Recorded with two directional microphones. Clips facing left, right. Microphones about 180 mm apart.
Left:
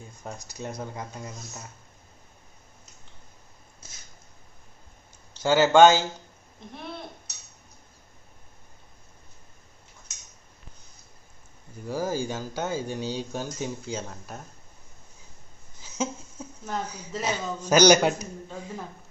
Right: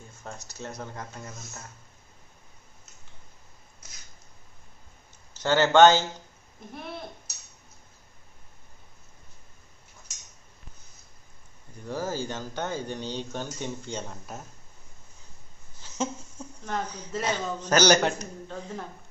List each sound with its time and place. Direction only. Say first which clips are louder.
0.2 s speech: left 3 dB; 15° left (ahead or behind)
3.8 s a sound: left 2 dB; 30° left (ahead or behind)
5.4 s speech: left 1 dB; 10° left (ahead or behind)
11.9 s speech: left 3 dB; 10° left (ahead or behind)
15.8 s speech: left 1 dB; 5° left (ahead or behind)